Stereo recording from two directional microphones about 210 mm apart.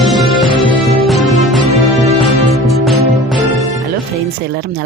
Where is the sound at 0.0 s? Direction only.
Centre (ahead or behind).